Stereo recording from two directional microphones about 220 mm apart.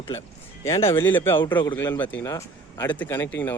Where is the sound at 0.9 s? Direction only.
10° left (ahead or behind).